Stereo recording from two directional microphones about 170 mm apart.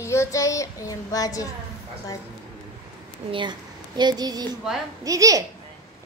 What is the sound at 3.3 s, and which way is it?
A woman's voice, 25° right (ahead or behind).